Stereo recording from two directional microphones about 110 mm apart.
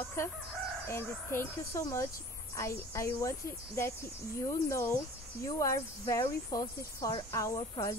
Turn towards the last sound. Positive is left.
turn(degrees=30)  # may be behind; listen again after turning